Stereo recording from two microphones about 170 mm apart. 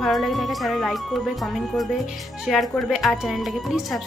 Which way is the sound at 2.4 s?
Centre (ahead or behind).